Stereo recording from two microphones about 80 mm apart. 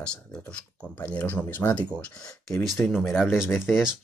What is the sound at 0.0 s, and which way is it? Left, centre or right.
Speech, centre.